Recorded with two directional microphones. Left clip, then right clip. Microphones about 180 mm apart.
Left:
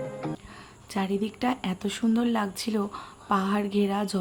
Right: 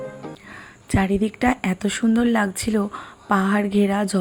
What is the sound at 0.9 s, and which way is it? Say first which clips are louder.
Speech: right 8 dB; 25° right (ahead or behind).